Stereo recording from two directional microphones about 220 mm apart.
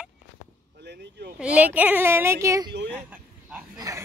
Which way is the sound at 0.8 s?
50° right (ahead or behind).